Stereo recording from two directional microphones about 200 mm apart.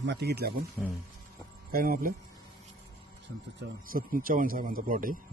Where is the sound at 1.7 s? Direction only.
45° right (ahead or behind).